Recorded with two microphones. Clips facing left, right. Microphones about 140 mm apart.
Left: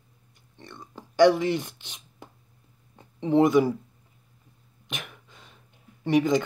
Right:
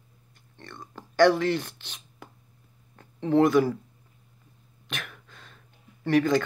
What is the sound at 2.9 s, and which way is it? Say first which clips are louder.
Speech: left 1 dB; 20° left (ahead or behind).